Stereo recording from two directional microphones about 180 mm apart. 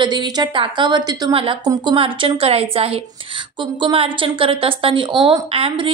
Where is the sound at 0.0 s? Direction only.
25° right (ahead or behind).